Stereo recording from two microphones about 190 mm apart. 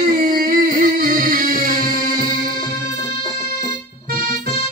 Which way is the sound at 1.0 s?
45° right (ahead or behind).